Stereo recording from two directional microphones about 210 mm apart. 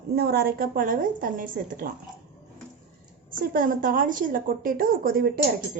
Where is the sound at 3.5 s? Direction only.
40° right (ahead or behind).